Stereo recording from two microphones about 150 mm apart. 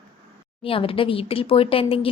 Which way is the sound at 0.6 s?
35° left (ahead or behind).